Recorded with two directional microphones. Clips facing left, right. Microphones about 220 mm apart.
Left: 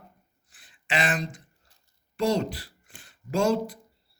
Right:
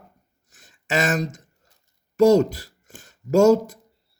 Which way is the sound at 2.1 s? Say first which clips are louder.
Right 10 dB; 45° right (ahead or behind).